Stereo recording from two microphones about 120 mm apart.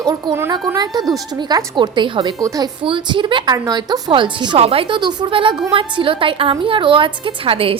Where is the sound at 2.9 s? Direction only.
40° right (ahead or behind).